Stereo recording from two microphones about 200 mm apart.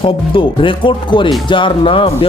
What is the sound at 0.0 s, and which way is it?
Speech, 25° left (ahead or behind).